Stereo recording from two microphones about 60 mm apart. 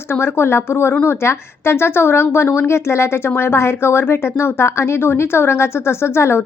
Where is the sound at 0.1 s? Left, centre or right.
Left.